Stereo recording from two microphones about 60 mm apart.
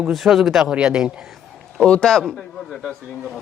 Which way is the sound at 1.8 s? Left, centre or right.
Centre.